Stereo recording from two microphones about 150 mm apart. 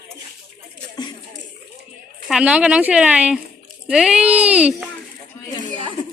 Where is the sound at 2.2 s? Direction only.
5° right (ahead or behind).